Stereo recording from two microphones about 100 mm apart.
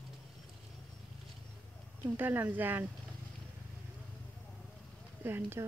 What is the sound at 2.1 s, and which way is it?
Speech, 20° right (ahead or behind).